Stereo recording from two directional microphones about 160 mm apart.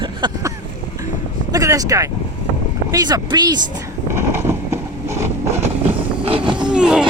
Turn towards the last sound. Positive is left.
turn(degrees=-5)  # may be behind; listen again after turning